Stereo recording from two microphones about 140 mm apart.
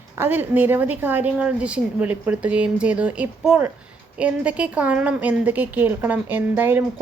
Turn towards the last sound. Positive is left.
turn(degrees=-15)  # may be behind; listen again after turning